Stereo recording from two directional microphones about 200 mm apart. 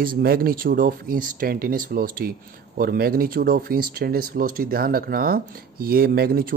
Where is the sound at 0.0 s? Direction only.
45° right (ahead or behind).